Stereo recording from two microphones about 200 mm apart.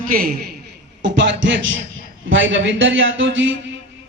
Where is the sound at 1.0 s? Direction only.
60° right (ahead or behind).